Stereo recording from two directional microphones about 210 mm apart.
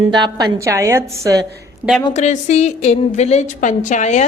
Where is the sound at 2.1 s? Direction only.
35° left (ahead or behind).